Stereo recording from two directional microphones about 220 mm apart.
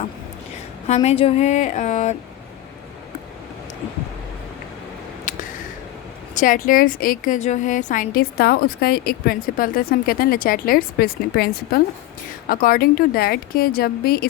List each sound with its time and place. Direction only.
0.9 s a woman's voice: 30° left (ahead or behind)
5.3 s a sound: 35° left (ahead or behind)
6.3 s a woman's voice: 35° left (ahead or behind)